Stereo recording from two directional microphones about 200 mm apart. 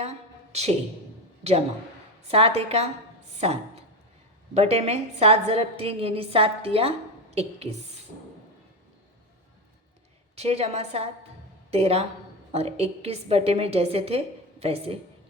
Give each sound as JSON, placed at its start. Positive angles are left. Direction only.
{"t": 0.5, "sound": "a woman's voice", "side_deg": -35}
{"t": 4.5, "sound": "a woman's voice", "side_deg": -30}
{"t": 10.3, "sound": "a woman's voice", "side_deg": -30}